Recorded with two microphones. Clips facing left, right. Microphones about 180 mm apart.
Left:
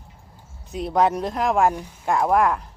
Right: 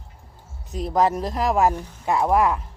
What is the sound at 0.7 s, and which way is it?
Speech, centre (ahead or behind).